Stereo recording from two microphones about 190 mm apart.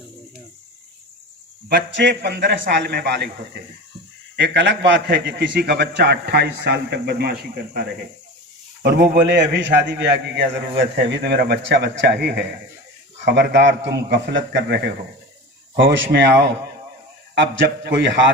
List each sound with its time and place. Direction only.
1.7 s a man's voice: 70° right (ahead or behind)
17.8 s a man's voice: 70° right (ahead or behind)